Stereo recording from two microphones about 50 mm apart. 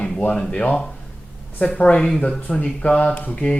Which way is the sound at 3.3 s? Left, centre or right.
Centre.